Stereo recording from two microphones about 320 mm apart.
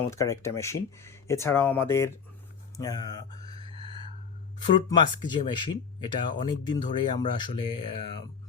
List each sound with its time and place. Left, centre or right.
0.1 s speech: centre
3.5 s a sound: centre
4.6 s speech: centre